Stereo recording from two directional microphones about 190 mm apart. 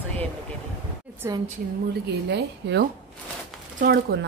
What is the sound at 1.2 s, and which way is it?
Speech, 15° right (ahead or behind).